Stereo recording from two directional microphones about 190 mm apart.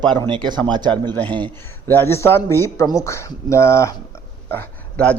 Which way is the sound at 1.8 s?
10° left (ahead or behind).